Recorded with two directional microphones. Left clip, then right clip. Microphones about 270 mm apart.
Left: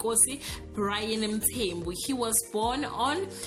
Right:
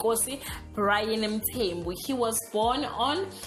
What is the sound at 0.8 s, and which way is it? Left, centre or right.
A woman's voice, centre.